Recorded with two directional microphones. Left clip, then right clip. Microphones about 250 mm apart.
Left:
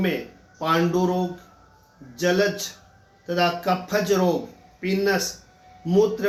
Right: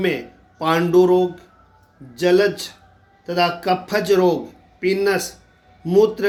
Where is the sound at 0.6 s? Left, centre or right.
Right.